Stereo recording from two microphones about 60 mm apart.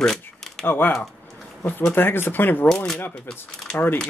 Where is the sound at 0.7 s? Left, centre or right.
Left.